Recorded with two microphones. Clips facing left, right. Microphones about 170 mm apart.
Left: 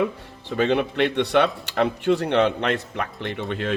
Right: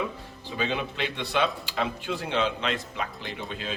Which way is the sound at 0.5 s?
65° left (ahead or behind).